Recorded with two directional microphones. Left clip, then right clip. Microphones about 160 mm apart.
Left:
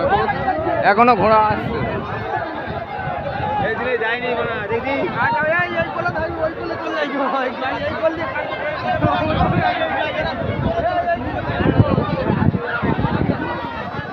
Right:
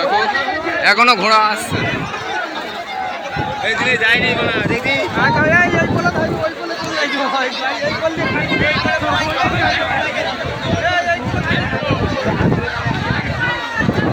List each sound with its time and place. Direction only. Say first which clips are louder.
0.8 s a man's voice: right 2 dB; 35° left (ahead or behind)
3.7 s a man's voice: right 6 dB; 25° left (ahead or behind)
5.2 s speech: right 5 dB; 65° right (ahead or behind)
7.0 s chatter: right 4 dB; 40° right (ahead or behind)